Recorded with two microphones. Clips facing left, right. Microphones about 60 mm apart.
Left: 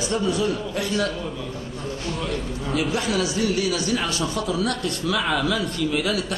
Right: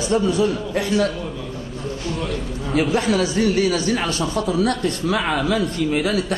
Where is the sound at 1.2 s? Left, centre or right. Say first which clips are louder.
Right 1 dB; centre.